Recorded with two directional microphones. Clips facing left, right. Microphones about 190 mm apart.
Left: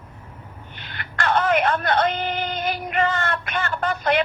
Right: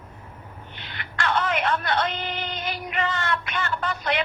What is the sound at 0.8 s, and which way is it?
Speech, 50° left (ahead or behind).